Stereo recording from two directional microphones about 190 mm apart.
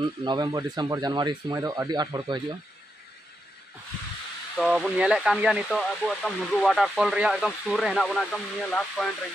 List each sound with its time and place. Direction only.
0.0 s speech: 25° right (ahead or behind)
4.6 s speech: 5° right (ahead or behind)